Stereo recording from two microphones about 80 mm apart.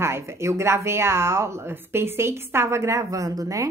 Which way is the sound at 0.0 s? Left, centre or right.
Right.